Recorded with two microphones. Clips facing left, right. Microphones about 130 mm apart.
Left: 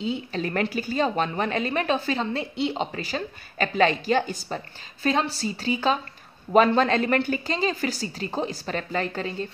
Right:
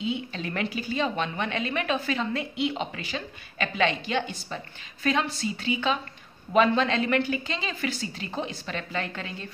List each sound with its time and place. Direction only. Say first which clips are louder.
0.0 s a woman's voice: left 3 dB; 35° left (ahead or behind)